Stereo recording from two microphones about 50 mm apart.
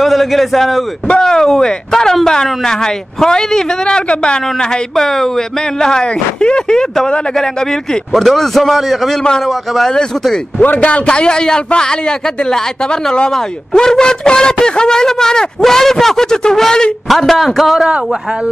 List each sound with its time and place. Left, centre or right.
0.0 s a man's voice: centre
1.0 s a man's voice: centre
8.1 s a man's voice: centre
10.6 s a man's voice: left; by 17.8 s centre